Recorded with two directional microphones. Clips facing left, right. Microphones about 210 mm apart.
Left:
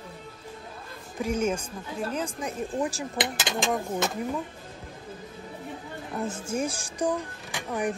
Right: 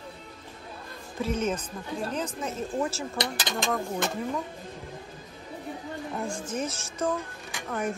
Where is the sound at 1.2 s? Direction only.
10° left (ahead or behind).